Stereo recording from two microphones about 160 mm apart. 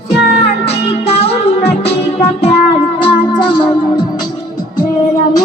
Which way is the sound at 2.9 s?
30° left (ahead or behind).